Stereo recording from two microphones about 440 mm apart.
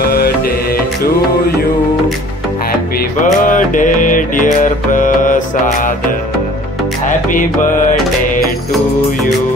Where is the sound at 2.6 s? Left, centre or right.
Centre.